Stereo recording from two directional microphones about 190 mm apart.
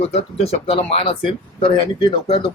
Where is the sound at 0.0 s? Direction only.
30° left (ahead or behind).